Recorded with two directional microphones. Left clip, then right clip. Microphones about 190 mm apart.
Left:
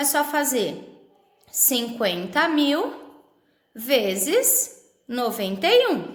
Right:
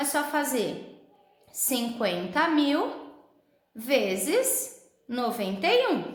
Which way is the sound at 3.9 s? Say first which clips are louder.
Left 4 dB; 25° left (ahead or behind).